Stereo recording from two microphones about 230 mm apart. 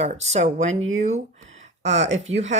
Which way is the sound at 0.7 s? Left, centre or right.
Right.